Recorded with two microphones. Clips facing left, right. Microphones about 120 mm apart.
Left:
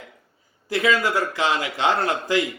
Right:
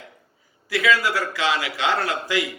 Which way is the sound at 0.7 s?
20° left (ahead or behind).